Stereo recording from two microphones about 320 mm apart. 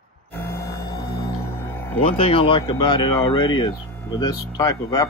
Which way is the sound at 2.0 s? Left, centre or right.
Centre.